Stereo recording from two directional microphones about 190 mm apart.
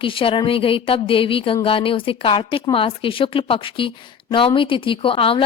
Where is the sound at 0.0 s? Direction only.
25° left (ahead or behind).